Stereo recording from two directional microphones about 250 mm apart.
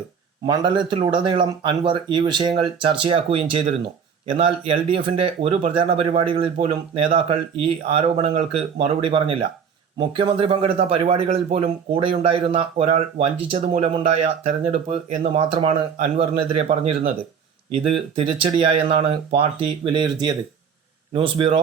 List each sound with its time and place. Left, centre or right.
0.4 s speech: centre
18.2 s speech: right